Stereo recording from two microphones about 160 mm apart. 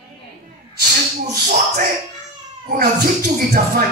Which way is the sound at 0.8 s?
70° right (ahead or behind).